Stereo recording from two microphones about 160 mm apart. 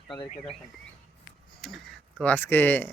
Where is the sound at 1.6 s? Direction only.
Centre (ahead or behind).